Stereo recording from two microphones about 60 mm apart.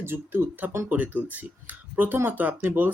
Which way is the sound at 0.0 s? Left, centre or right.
Right.